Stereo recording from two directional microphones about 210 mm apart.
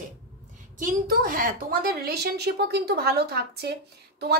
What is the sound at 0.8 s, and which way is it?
A woman's voice, 40° right (ahead or behind).